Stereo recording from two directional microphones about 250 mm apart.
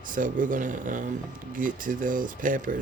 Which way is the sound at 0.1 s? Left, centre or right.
Right.